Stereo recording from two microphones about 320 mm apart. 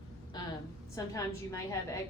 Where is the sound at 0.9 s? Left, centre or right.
Centre.